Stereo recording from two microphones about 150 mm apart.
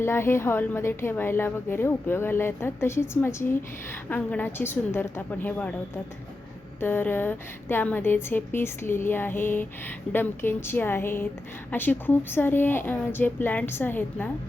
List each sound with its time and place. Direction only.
0.0 s a woman's voice: 15° left (ahead or behind)
6.7 s a woman's voice: 15° left (ahead or behind)